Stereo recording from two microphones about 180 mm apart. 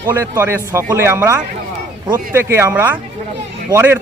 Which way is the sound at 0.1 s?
10° right (ahead or behind).